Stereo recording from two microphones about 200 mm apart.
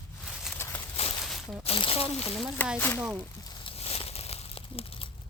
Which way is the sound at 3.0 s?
5° right (ahead or behind).